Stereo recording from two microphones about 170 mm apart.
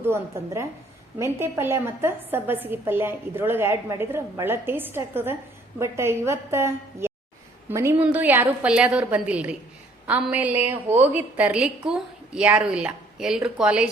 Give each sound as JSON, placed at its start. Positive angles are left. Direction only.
{"t": 0.0, "sound": "a woman's voice", "side_deg": -15}